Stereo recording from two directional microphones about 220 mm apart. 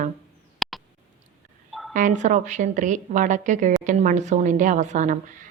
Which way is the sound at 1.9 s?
35° right (ahead or behind).